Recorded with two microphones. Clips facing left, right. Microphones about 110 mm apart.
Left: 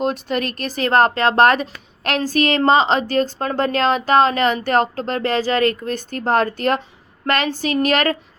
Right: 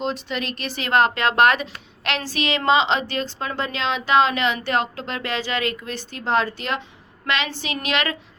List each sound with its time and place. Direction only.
0.0 s speech: 50° left (ahead or behind)